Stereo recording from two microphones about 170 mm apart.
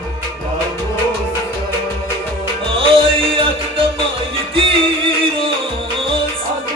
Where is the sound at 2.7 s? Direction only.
30° right (ahead or behind).